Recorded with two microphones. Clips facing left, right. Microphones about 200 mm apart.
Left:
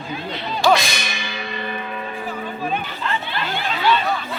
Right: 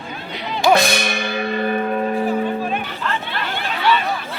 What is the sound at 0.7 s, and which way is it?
Music, 60° right (ahead or behind).